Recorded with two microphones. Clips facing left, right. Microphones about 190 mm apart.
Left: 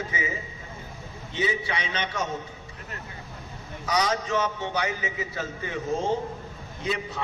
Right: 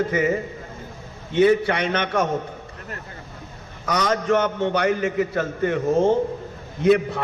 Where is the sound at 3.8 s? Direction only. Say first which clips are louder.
Right 4 dB; 60° right (ahead or behind).